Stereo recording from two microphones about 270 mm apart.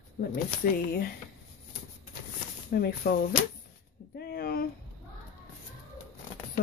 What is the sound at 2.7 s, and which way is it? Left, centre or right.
Speech, left.